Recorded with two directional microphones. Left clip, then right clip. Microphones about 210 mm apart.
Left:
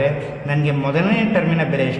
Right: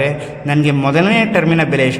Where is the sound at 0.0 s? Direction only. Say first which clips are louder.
Right 2 dB; 30° right (ahead or behind).